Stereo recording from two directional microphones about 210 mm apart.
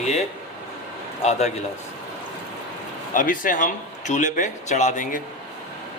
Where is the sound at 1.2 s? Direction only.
30° left (ahead or behind).